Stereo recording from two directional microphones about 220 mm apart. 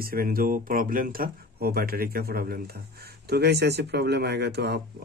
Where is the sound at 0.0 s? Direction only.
40° right (ahead or behind).